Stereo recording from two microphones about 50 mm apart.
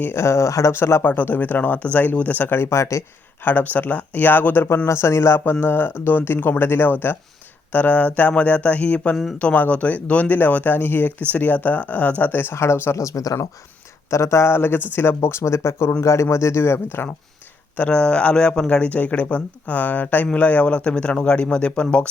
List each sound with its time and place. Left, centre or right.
0.1 s speech: left
0.7 s speech: left
1.0 s speech: left
2.6 s speech: left
3.4 s speech: left
4.9 s speech: left
5.5 s speech: left
11.3 s speech: left
12.5 s speech: left
13.0 s speech: left
17.7 s speech: left